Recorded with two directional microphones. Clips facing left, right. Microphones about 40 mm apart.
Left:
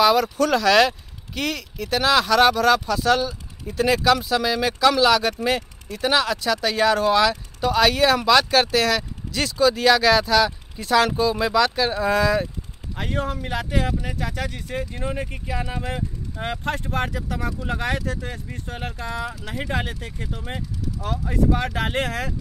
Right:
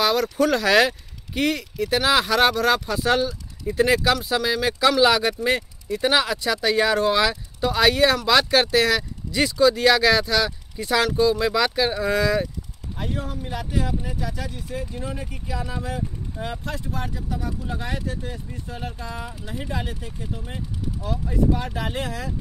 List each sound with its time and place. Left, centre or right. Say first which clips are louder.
0.0 s speech: left 2 dB; centre
12.9 s speech: left 4 dB; left
14.9 s speech: left 3 dB; left
19.6 s speech: left 4 dB; left